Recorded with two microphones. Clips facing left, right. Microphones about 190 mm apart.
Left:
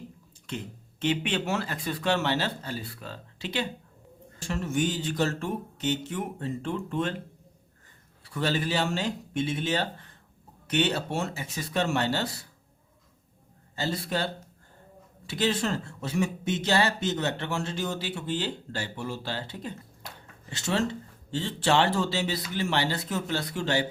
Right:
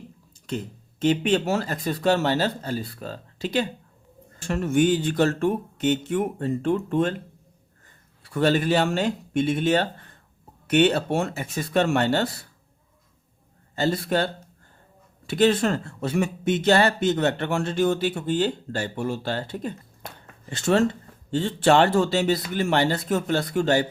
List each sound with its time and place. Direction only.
0.4 s speech: 40° right (ahead or behind)
4.4 s speech: 55° right (ahead or behind)
8.2 s speech: 55° right (ahead or behind)
13.7 s speech: 55° right (ahead or behind)
15.3 s speech: 55° right (ahead or behind)